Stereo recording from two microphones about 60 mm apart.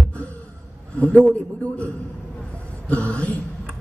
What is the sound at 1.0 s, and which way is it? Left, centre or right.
Speech, left.